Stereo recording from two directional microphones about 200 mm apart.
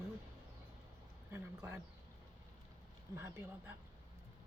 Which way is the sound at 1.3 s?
10° right (ahead or behind).